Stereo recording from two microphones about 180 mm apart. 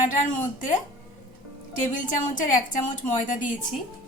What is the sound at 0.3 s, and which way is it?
A woman's voice, 45° left (ahead or behind).